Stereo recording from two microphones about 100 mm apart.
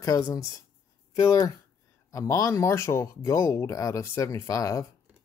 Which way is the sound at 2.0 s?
30° left (ahead or behind).